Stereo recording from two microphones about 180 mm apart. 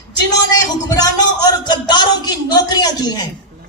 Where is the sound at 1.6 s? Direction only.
25° left (ahead or behind).